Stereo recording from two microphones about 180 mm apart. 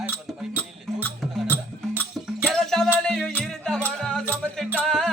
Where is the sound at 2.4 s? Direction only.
Centre (ahead or behind).